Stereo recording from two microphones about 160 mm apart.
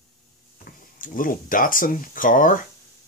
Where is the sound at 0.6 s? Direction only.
55° left (ahead or behind).